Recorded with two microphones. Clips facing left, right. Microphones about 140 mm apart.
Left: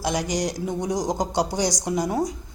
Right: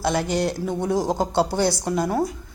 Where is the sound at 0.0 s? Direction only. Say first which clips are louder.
Right 3 dB; 15° left (ahead or behind).